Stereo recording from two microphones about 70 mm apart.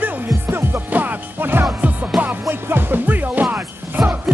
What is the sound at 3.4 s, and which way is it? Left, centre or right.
Music, centre.